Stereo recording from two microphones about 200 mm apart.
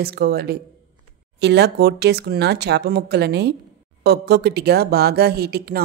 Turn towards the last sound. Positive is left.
turn(degrees=-50)  # may be behind; listen again after turning